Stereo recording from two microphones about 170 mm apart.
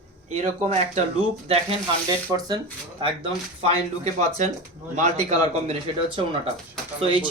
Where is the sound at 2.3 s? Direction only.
20° right (ahead or behind).